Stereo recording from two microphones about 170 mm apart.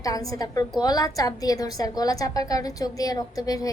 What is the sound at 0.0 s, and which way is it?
A woman's voice, 20° left (ahead or behind).